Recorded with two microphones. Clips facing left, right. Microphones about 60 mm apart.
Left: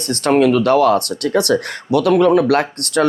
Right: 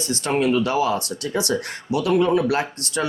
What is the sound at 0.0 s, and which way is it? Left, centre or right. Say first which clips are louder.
Speech: left 7 dB; left.